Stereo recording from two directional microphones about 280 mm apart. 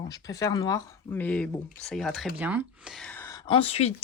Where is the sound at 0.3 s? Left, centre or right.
Centre.